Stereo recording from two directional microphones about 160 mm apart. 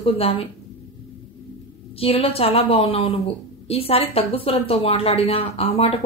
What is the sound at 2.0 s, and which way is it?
A woman's voice, 35° left (ahead or behind).